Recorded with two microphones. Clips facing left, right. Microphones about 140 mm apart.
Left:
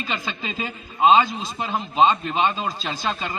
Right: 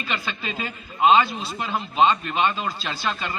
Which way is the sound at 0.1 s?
20° left (ahead or behind).